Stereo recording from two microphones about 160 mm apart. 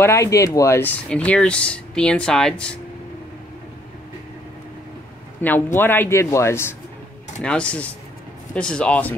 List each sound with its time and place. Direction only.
0.0 s speech: 20° left (ahead or behind)
5.4 s speech: 10° left (ahead or behind)